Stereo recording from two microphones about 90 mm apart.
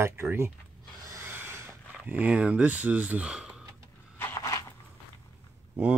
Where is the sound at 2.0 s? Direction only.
15° right (ahead or behind).